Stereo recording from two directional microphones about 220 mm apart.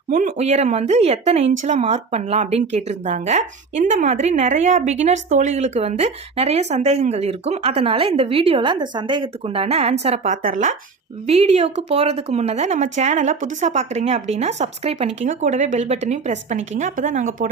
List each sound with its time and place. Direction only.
0.1 s a woman's voice: 35° right (ahead or behind)